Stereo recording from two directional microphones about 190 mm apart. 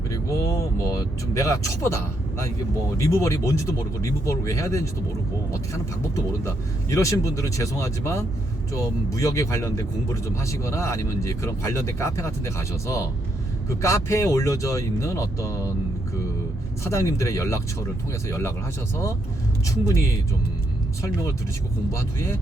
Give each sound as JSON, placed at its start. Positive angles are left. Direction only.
{"t": 0.1, "sound": "vehicle", "side_deg": 15}
{"t": 1.3, "sound": "speech", "side_deg": 15}
{"t": 3.1, "sound": "speech", "side_deg": 15}
{"t": 6.9, "sound": "speech", "side_deg": 15}
{"t": 16.8, "sound": "speech", "side_deg": 15}
{"t": 19.6, "sound": "speech", "side_deg": 15}